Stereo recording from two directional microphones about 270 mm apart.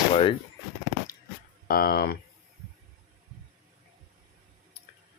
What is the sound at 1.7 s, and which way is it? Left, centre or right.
Speech, left.